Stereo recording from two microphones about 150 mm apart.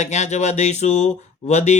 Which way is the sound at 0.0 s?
50° left (ahead or behind).